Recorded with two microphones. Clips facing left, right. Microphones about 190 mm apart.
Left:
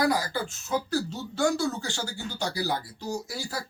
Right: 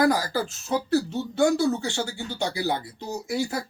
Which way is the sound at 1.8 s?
20° right (ahead or behind).